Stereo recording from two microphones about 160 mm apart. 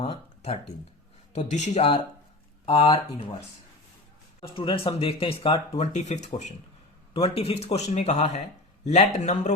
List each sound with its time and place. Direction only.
0.0 s speech: 35° left (ahead or behind)
1.4 s speech: 45° left (ahead or behind)
2.6 s speech: 30° left (ahead or behind)
4.4 s speech: 30° left (ahead or behind)
5.7 s speech: 45° left (ahead or behind)